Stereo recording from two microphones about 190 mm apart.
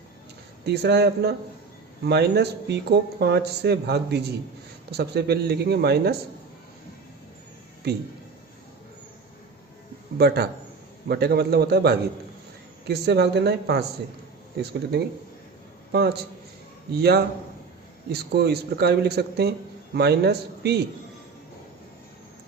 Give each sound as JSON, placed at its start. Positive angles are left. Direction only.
{"t": 0.6, "sound": "a man's voice", "side_deg": -60}
{"t": 7.8, "sound": "a man's voice", "side_deg": -55}
{"t": 10.2, "sound": "a man's voice", "side_deg": -55}